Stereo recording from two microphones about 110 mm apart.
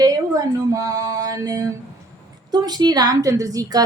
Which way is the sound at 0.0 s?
35° right (ahead or behind).